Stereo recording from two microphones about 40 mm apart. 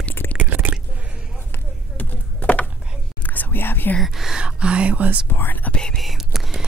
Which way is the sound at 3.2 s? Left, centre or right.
Left.